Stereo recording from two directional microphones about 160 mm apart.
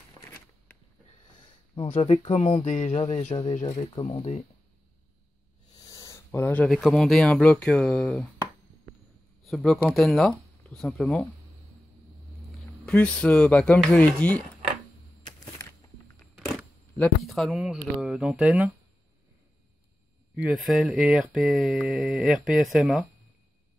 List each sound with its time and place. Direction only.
1.9 s speech: 40° left (ahead or behind)
3.3 s speech: 30° left (ahead or behind)
5.8 s speech: 20° left (ahead or behind); by 8.3 s 5° left (ahead or behind)
9.4 s speech: centre (ahead or behind)
12.8 s speech: 5° left (ahead or behind)
17.0 s speech: centre (ahead or behind)
20.3 s speech: 5° right (ahead or behind)